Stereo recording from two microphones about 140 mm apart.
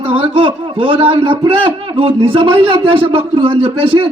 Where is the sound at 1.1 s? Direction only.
35° right (ahead or behind).